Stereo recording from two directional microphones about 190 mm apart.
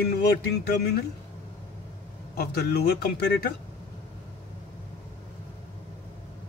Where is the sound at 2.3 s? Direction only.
55° left (ahead or behind).